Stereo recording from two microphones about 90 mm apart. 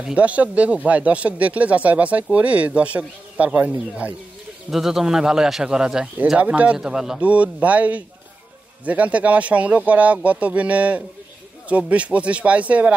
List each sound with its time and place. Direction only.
0.0 s speech: 15° right (ahead or behind)
4.6 s speech: 5° right (ahead or behind)